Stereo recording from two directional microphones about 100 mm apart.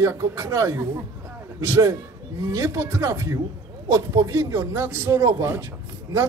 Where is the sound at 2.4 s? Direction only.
40° right (ahead or behind).